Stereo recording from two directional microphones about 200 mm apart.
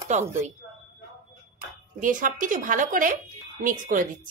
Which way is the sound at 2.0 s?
40° right (ahead or behind).